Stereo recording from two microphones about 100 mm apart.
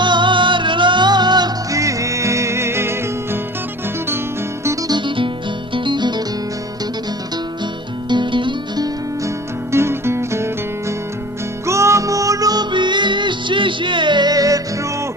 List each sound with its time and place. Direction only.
0.0 s music: 50° right (ahead or behind); by 3.0 s 25° right (ahead or behind)
4.9 s music: 55° right (ahead or behind)
8.1 s music: 50° right (ahead or behind)
9.7 s music: 25° right (ahead or behind)